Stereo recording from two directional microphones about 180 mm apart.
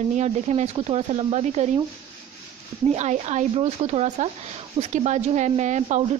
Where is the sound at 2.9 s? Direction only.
40° right (ahead or behind).